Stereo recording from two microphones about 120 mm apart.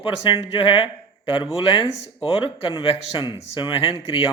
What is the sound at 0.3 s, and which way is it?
Speech, 45° left (ahead or behind).